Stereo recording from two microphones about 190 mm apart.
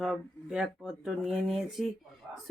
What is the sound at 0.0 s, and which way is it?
Speech, centre (ahead or behind).